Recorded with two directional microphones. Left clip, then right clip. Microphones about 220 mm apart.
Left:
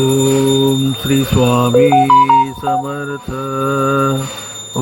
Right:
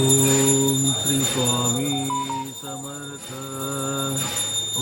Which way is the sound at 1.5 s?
25° left (ahead or behind).